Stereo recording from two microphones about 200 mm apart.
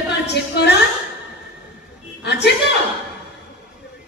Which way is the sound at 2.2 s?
55° left (ahead or behind).